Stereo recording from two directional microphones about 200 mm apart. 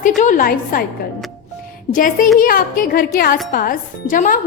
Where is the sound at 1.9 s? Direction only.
40° left (ahead or behind).